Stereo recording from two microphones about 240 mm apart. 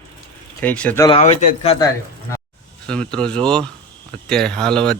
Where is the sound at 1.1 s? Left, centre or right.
Left.